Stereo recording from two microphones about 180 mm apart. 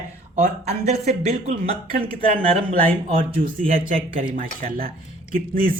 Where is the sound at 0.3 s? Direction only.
40° right (ahead or behind).